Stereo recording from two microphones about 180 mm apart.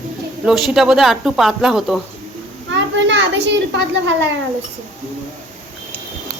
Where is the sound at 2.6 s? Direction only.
85° right.